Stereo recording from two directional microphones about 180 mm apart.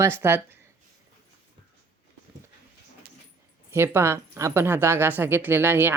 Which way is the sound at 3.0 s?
55° right (ahead or behind).